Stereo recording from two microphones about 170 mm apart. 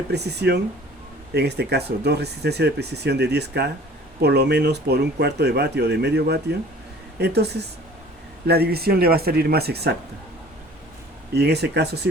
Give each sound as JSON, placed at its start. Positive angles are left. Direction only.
{"t": 0.1, "sound": "speech", "side_deg": -75}
{"t": 11.3, "sound": "speech", "side_deg": -75}